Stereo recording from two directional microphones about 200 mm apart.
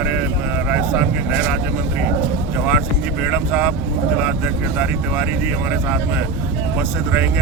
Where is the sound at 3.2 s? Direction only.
5° right (ahead or behind).